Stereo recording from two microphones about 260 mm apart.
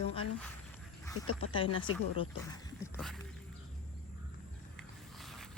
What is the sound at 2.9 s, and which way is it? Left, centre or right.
Music, centre.